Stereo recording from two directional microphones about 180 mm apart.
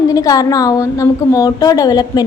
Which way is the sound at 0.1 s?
20° left (ahead or behind).